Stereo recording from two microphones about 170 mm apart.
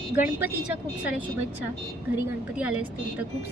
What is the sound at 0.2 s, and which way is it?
Speech, 10° right (ahead or behind).